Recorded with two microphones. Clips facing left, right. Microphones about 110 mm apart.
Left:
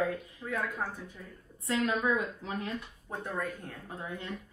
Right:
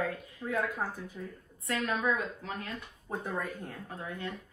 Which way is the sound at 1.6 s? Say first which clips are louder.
Left 2 dB; 20° left (ahead or behind).